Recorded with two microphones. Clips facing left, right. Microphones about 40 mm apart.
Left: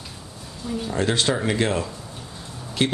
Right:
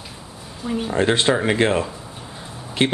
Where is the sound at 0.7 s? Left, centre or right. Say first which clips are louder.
Right 4 dB; right.